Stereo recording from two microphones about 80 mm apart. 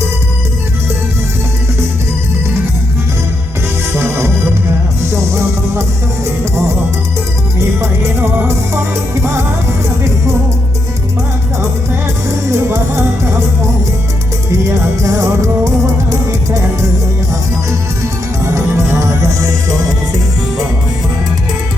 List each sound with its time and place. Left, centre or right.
3.9 s music: right
7.8 s music: right
12.5 s music: right
14.7 s music: right
18.5 s music: right